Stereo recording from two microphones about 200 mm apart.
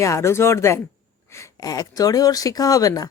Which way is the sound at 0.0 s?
15° left (ahead or behind).